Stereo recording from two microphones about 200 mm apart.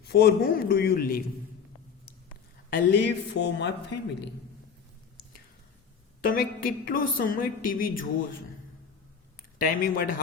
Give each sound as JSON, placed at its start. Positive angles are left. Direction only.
{"t": 0.1, "sound": "a woman's voice", "side_deg": 55}
{"t": 2.9, "sound": "speech", "side_deg": 60}
{"t": 6.2, "sound": "a woman's voice", "side_deg": 45}
{"t": 9.6, "sound": "a woman's voice", "side_deg": 45}